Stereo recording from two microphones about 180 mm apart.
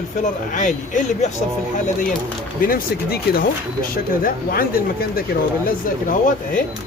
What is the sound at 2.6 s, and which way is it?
Speech, 55° left (ahead or behind).